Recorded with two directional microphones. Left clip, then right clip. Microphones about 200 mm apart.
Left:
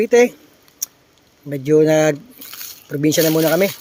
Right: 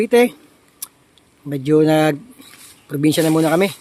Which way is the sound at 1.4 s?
15° right (ahead or behind).